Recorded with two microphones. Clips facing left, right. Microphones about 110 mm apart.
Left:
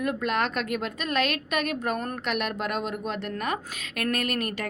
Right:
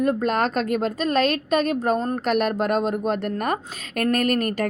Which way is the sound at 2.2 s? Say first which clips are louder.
Right 8 dB; 40° right (ahead or behind).